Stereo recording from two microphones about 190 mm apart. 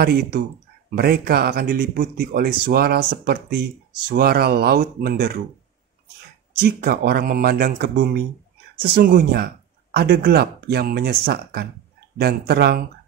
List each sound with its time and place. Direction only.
0.0 s speech: 55° right (ahead or behind)
6.6 s speech: 55° right (ahead or behind)